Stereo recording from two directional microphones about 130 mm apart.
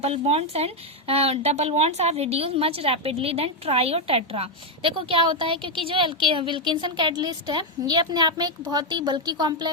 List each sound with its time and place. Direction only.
0.0 s a woman's voice: 50° right (ahead or behind); by 9.6 s 35° right (ahead or behind)